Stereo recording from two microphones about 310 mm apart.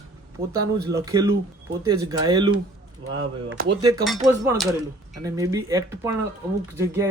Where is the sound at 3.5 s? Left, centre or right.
Right.